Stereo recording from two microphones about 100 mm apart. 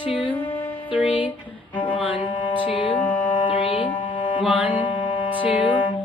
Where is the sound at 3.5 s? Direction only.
60° left (ahead or behind).